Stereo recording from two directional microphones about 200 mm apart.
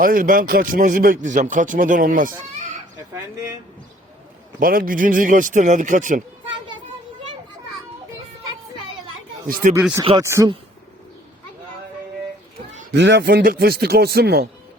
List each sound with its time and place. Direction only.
0.0 s speech: 45° right (ahead or behind)
4.6 s speech: 45° right (ahead or behind)
9.6 s speech: 40° right (ahead or behind)
10.0 s speech: 25° right (ahead or behind)
10.2 s speech: 15° right (ahead or behind)
12.9 s speech: 60° right (ahead or behind)